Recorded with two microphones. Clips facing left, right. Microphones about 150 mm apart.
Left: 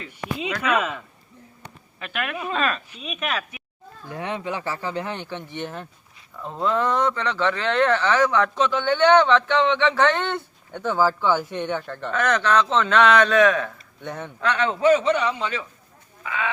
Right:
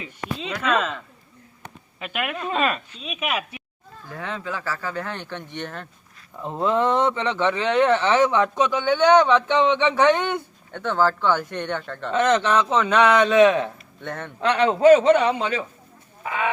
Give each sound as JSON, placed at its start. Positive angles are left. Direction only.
{"t": 0.6, "sound": "speech", "side_deg": 5}
{"t": 2.0, "sound": "speech", "side_deg": -15}
{"t": 3.0, "sound": "speech", "side_deg": 0}
{"t": 4.1, "sound": "speech", "side_deg": 20}
{"t": 6.4, "sound": "speech", "side_deg": -20}
{"t": 10.7, "sound": "speech", "side_deg": 5}
{"t": 12.1, "sound": "a man's voice", "side_deg": -25}
{"t": 14.0, "sound": "speech", "side_deg": 5}
{"t": 14.4, "sound": "a man's voice", "side_deg": -30}
{"t": 14.8, "sound": "a man's voice", "side_deg": -45}
{"t": 16.2, "sound": "speech", "side_deg": -35}